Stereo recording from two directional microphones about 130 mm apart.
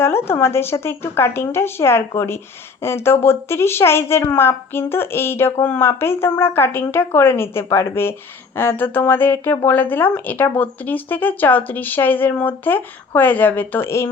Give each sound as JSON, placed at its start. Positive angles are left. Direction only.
{"t": 0.0, "sound": "a woman's voice", "side_deg": 20}